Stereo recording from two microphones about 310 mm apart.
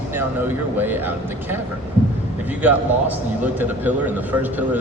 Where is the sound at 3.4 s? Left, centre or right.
Centre.